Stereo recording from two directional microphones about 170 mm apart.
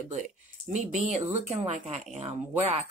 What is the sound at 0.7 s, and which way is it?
Speech, 45° right (ahead or behind).